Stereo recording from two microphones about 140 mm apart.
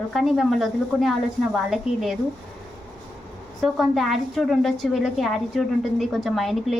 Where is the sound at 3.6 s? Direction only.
Centre (ahead or behind).